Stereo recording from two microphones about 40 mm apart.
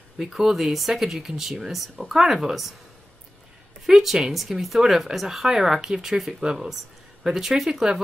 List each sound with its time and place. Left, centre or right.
0.2 s speech: centre
3.8 s speech: centre